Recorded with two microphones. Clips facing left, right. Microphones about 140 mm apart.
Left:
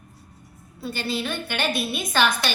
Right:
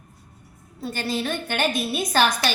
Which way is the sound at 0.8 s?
45° right (ahead or behind).